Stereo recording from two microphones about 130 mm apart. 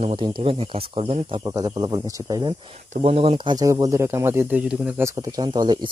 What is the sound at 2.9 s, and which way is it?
Speech, 50° right (ahead or behind).